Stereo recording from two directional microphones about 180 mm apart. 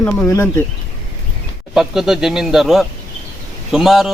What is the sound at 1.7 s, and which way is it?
Speech, 5° right (ahead or behind).